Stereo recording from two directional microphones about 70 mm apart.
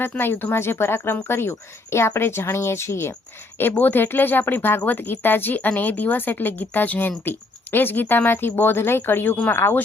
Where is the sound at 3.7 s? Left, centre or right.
Left.